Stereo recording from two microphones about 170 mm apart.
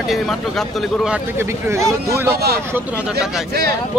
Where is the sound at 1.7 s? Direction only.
15° right (ahead or behind).